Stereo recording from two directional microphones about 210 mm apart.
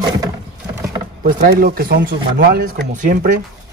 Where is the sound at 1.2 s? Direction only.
45° right (ahead or behind).